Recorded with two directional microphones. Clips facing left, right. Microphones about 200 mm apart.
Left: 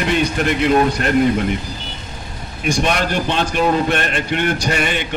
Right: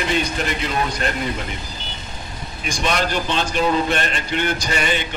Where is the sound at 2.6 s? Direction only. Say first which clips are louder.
Left 4 dB; 60° left (ahead or behind).